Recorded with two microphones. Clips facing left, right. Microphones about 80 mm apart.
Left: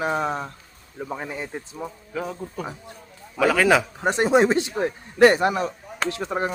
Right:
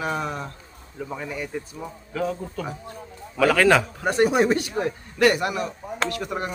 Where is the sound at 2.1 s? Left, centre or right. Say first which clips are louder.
Right 3 dB; centre.